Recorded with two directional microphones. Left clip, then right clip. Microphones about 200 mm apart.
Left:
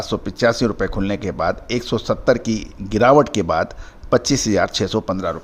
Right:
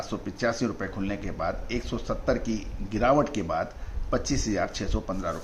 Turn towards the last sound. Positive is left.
turn(degrees=50)  # may be behind; listen again after turning